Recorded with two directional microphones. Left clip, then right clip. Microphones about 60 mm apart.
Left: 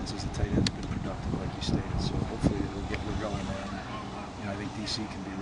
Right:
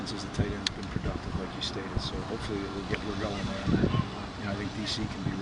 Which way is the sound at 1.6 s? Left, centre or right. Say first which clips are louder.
Even; centre.